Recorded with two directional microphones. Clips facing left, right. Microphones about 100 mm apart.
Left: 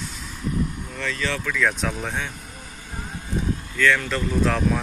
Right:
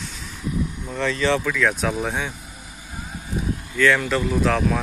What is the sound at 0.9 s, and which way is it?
Speech, 25° right (ahead or behind).